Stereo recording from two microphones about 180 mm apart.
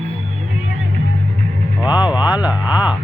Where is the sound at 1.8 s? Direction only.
25° left (ahead or behind).